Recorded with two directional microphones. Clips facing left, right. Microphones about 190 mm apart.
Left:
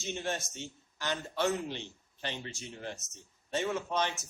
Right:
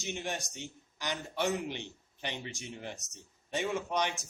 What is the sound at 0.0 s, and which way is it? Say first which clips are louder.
A man's voice: left 2 dB; 15° right (ahead or behind).